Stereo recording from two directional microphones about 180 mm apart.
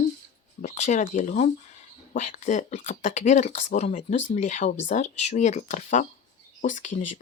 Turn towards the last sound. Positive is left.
turn(degrees=45)  # may be behind; listen again after turning